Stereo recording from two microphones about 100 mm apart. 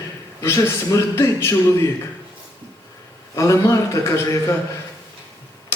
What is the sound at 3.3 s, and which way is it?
Speech, 30° left (ahead or behind).